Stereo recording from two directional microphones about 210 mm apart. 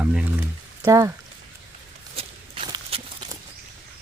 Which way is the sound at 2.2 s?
25° right (ahead or behind).